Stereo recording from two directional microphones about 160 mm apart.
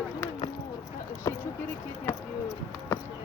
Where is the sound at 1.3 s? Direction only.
25° left (ahead or behind).